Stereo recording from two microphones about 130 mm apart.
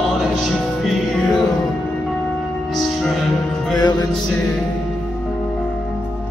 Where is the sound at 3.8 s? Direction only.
30° left (ahead or behind).